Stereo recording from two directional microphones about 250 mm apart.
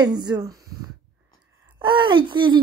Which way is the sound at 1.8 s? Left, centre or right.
Centre.